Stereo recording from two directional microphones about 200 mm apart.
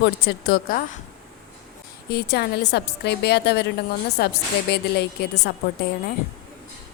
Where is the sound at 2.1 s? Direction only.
55° left (ahead or behind).